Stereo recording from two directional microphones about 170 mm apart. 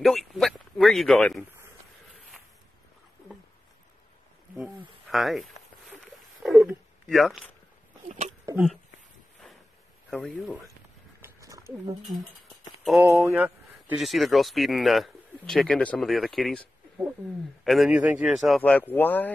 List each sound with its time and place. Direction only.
0.0 s speech: centre (ahead or behind)
4.6 s a sound: 5° right (ahead or behind)
10.0 s speech: 5° left (ahead or behind)
11.1 s wild animals: 15° right (ahead or behind)
12.1 s a sound: centre (ahead or behind)
13.0 s speech: 15° right (ahead or behind)
17.6 s speech: 5° right (ahead or behind)